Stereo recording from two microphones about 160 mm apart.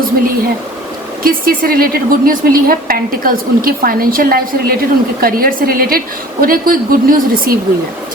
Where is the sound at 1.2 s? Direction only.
65° right (ahead or behind).